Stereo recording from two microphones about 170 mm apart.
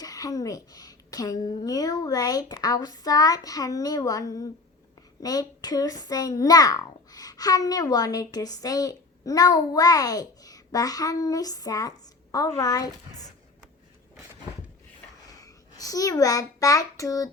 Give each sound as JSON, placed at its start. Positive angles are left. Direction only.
{"t": 0.0, "sound": "a child's voice", "side_deg": 20}
{"t": 15.4, "sound": "a child's voice", "side_deg": 20}